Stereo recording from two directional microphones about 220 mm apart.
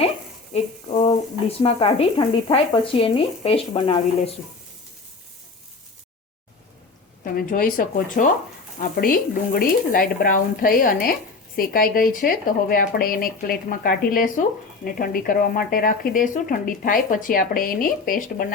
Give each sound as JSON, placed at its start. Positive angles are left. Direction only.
{"t": 0.5, "sound": "speech", "side_deg": 25}
{"t": 7.3, "sound": "speech", "side_deg": 40}